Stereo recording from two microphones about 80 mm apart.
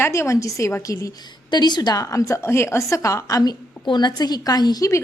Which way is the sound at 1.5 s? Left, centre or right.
Left.